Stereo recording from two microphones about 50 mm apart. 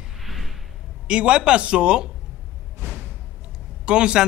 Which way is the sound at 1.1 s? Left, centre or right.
Right.